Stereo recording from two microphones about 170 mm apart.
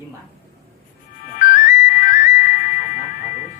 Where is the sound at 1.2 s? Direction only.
50° left (ahead or behind).